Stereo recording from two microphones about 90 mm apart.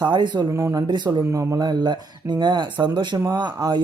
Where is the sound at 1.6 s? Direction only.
50° right (ahead or behind).